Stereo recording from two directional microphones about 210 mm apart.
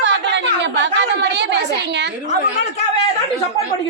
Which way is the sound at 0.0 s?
55° right (ahead or behind).